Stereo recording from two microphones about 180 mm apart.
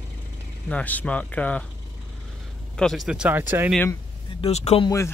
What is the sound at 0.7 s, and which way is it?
Speech, 10° left (ahead or behind).